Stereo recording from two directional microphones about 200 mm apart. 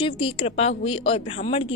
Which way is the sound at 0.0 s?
25° left (ahead or behind).